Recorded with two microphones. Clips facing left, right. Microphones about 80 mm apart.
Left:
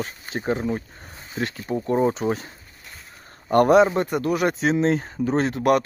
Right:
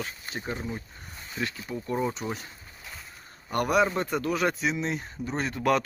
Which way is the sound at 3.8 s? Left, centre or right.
Centre.